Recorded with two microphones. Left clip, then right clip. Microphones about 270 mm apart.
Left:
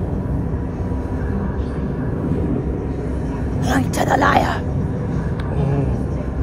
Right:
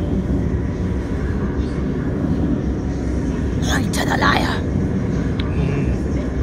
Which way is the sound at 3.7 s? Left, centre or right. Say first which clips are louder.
Left 3 dB; left.